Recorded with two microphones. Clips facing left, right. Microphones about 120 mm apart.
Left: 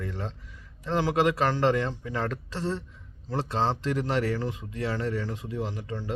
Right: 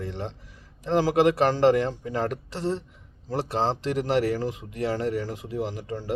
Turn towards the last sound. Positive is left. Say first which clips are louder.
# right 3 dB
turn(degrees=-25)  # may be behind; listen again after turning